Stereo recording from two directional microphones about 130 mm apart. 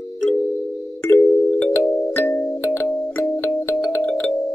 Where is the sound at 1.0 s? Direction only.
20° left (ahead or behind).